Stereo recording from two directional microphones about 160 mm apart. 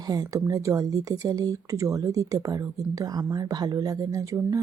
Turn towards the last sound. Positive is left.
turn(degrees=-20)  # may be behind; listen again after turning